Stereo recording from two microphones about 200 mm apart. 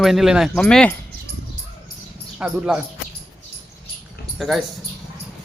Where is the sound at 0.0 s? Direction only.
Centre (ahead or behind).